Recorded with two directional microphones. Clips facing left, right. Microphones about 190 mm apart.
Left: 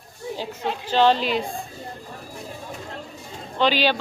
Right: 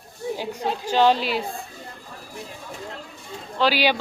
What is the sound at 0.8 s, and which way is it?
Speech, 10° right (ahead or behind).